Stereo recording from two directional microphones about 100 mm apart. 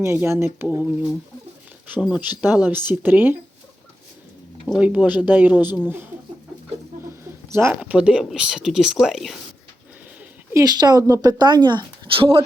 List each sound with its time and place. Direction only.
0.0 s speech: 25° right (ahead or behind)
2.0 s speech: 5° right (ahead or behind)
4.8 s speech: 15° right (ahead or behind)
7.5 s speech: 25° right (ahead or behind)
7.8 s speech: 10° right (ahead or behind)
10.5 s speech: 40° right (ahead or behind); by 12.4 s 65° right (ahead or behind)